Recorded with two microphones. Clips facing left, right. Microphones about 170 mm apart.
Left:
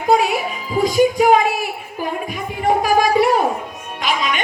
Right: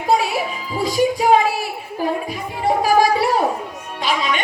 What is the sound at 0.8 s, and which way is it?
Music, 30° right (ahead or behind).